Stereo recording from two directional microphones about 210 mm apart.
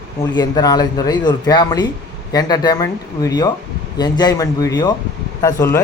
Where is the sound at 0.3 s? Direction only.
20° left (ahead or behind).